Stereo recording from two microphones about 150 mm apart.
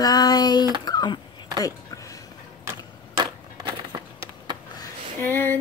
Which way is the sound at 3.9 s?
25° right (ahead or behind).